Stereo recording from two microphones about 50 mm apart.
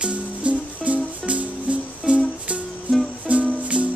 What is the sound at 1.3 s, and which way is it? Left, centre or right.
Music, right.